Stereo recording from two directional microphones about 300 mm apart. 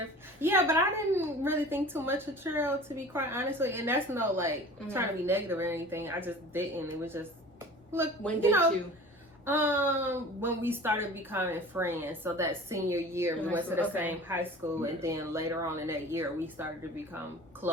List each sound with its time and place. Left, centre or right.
0.4 s a woman's voice: centre
8.4 s a woman's voice: centre